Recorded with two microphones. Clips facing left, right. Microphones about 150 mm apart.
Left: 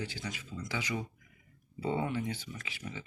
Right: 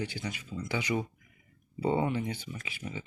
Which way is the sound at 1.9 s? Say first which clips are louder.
Right 4 dB; 20° right (ahead or behind).